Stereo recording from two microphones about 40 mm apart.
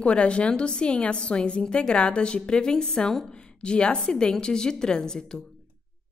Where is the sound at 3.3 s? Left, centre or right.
Left.